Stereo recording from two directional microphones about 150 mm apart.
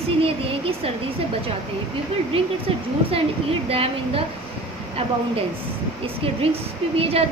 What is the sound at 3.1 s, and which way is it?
A woman's voice, 40° right (ahead or behind).